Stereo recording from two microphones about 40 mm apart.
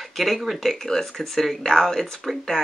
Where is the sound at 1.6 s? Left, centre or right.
Centre.